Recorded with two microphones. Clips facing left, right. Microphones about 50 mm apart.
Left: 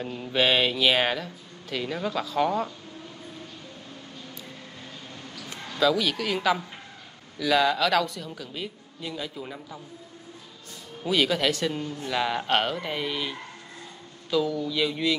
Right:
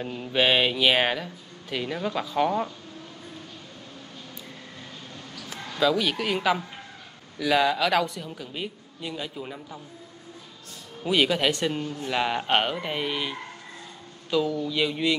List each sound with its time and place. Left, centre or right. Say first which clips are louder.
0.0 s a man's voice: right 1 dB; centre
5.7 s a man's voice: even; centre
11.2 s a man's voice: right 1 dB; centre
11.7 s speech: right 1 dB; right
12.1 s a man's voice: right 1 dB; centre